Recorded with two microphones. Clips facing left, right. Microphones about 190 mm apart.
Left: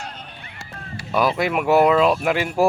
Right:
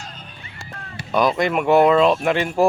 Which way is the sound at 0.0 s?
60° left (ahead or behind).